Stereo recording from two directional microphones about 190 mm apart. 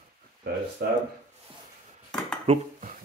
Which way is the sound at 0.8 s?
55° right (ahead or behind).